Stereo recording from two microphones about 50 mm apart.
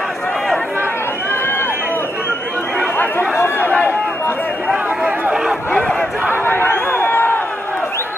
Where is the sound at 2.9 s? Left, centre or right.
Left.